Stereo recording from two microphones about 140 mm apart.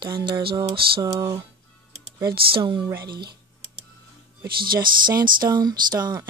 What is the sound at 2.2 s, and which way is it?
Speech, 35° right (ahead or behind).